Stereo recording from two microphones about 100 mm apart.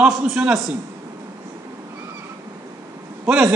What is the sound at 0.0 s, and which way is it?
Speech, 10° right (ahead or behind).